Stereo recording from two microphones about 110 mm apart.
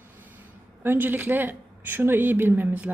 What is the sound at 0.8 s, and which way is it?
A woman's voice, 20° right (ahead or behind).